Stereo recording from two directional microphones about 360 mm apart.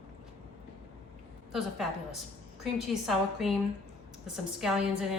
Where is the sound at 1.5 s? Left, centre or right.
Centre.